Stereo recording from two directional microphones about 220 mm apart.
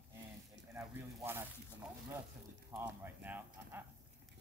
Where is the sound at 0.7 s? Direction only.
10° right (ahead or behind).